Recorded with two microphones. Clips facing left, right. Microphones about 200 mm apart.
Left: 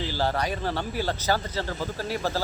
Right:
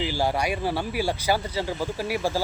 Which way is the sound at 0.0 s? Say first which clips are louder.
Right 2 dB; 15° right (ahead or behind).